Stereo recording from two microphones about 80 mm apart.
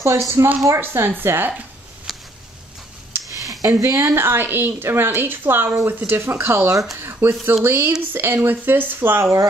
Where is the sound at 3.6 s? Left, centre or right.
Right.